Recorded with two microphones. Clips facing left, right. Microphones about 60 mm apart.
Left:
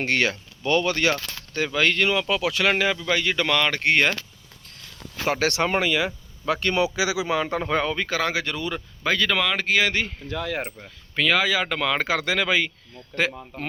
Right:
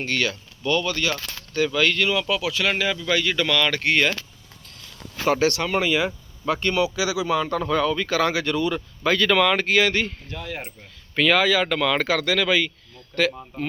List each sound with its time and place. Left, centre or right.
0.0 s speech: left
1.1 s speech: left
2.3 s speech: left
5.2 s speech: centre
5.8 s speech: centre
6.7 s speech: left
7.0 s speech: centre
10.3 s speech: left
10.6 s speech: left
11.1 s speech: centre; by 12.7 s left